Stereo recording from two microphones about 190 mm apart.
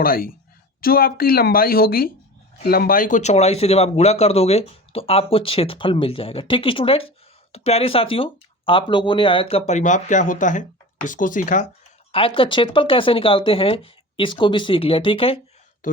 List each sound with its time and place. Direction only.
0.0 s a woman's voice: 50° left (ahead or behind)
12.1 s speech: 30° left (ahead or behind)
15.8 s speech: 45° left (ahead or behind)